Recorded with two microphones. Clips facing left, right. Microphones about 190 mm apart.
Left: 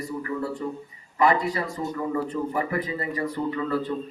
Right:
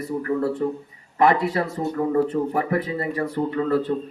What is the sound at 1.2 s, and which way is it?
Speech, 60° right (ahead or behind).